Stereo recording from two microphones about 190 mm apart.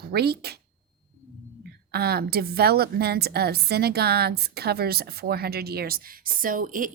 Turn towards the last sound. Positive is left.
turn(degrees=-45)  # may be behind; listen again after turning